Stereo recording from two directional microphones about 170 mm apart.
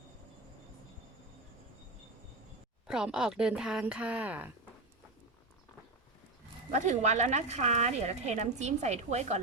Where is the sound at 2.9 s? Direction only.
5° right (ahead or behind).